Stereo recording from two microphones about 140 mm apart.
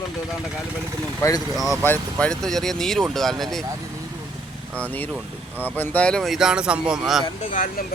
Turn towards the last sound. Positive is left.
turn(degrees=75)  # may be behind; listen again after turning